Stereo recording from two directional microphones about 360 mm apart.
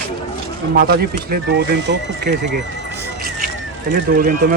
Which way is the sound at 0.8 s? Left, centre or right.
Right.